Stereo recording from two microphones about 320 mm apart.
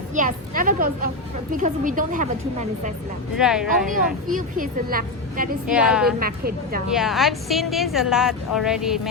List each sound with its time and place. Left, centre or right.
0.1 s a woman's voice: right
3.3 s a woman's voice: centre
4.3 s a woman's voice: right
5.6 s a woman's voice: centre
6.1 s a woman's voice: right
6.8 s a woman's voice: centre